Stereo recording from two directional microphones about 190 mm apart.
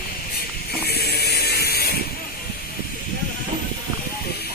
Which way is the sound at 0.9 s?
55° left (ahead or behind).